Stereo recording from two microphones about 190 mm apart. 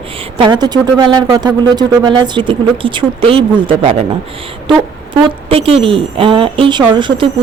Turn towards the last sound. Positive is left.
turn(degrees=-25)  # may be behind; listen again after turning